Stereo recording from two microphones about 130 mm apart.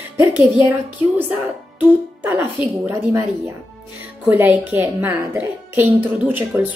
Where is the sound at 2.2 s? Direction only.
15° right (ahead or behind).